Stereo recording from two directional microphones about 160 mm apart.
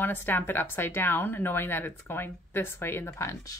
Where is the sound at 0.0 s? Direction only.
10° left (ahead or behind).